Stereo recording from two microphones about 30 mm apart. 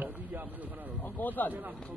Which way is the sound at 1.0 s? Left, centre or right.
Left.